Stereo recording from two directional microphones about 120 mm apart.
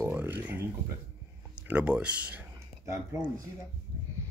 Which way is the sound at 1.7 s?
10° right (ahead or behind).